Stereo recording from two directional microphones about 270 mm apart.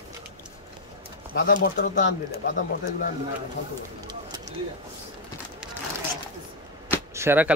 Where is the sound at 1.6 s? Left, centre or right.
Left.